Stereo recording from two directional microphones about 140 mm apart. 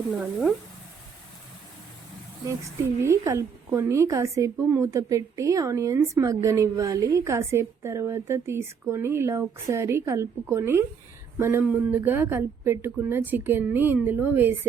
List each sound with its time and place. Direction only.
0.1 s speech: centre (ahead or behind)
2.5 s a woman's voice: 20° right (ahead or behind)